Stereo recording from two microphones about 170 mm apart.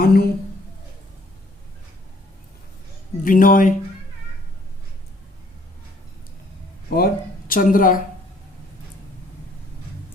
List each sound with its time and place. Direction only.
0.0 s a woman's voice: 65° left (ahead or behind)
3.2 s speech: 55° left (ahead or behind)
6.9 s speech: 60° left (ahead or behind)